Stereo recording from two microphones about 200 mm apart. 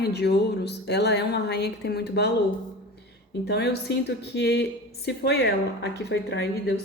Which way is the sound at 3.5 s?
55° left (ahead or behind).